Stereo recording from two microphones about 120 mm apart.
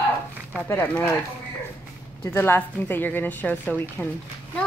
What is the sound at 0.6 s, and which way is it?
Speech, 20° left (ahead or behind).